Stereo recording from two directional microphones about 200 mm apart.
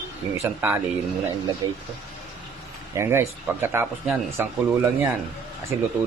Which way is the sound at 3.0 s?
10° right (ahead or behind).